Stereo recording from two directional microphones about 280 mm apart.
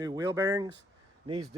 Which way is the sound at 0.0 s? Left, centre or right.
Centre.